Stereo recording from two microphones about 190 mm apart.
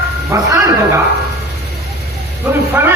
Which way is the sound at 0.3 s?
15° right (ahead or behind).